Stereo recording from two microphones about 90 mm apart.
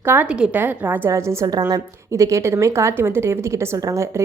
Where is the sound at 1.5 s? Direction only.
45° right (ahead or behind).